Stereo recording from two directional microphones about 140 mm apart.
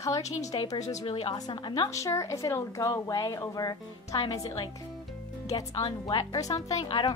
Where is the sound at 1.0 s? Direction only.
40° left (ahead or behind).